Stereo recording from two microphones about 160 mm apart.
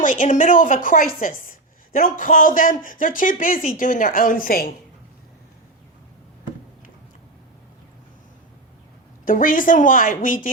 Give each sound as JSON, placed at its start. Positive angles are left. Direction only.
{"t": 0.0, "sound": "a woman's voice", "side_deg": 55}
{"t": 9.2, "sound": "a woman's voice", "side_deg": 60}